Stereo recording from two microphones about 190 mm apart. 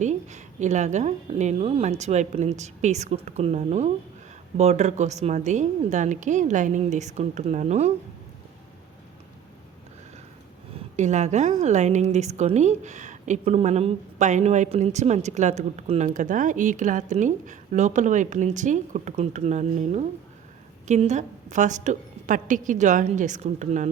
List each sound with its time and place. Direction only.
0.0 s a woman's voice: 40° right (ahead or behind)
10.9 s a woman's voice: 40° right (ahead or behind)